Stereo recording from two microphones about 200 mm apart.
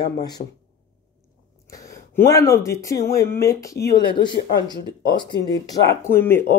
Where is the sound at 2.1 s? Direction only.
15° left (ahead or behind).